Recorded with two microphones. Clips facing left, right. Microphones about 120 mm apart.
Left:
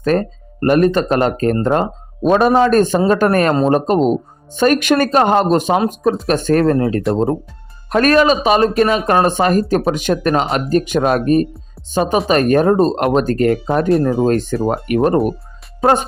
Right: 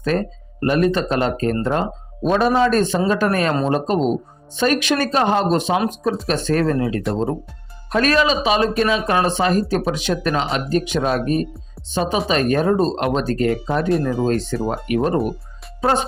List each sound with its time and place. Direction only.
0.0 s speech: 50° left (ahead or behind)